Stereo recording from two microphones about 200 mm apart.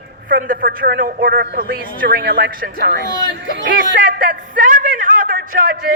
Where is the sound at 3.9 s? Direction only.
45° right (ahead or behind).